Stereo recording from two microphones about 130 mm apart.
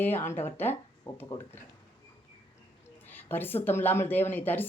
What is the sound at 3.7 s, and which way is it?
Speech, 15° left (ahead or behind).